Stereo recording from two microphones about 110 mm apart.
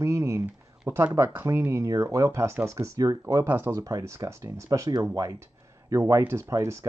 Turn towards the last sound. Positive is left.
turn(degrees=-30)  # may be behind; listen again after turning